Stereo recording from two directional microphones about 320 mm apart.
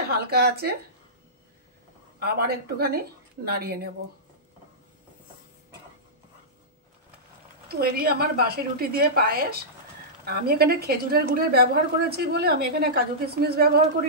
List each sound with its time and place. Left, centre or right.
0.1 s a woman's voice: right
2.1 s a woman's voice: right
7.6 s a woman's voice: right